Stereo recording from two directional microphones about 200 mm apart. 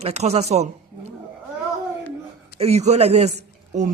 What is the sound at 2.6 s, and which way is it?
A man's voice, 30° right (ahead or behind).